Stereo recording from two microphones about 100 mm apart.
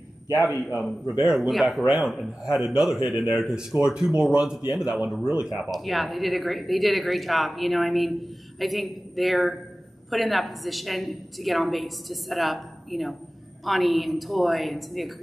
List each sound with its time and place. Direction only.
1.2 s speech: 5° right (ahead or behind)